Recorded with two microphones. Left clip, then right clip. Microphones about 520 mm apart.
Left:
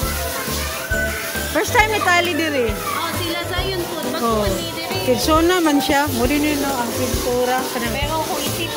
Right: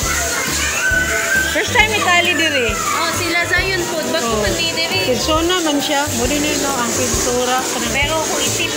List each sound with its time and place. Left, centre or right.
1.8 s music: left
5.3 s speech: left